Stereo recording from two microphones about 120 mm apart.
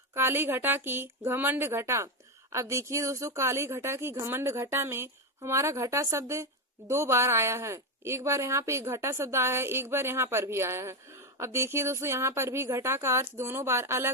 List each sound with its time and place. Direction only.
0.1 s speech: 20° right (ahead or behind)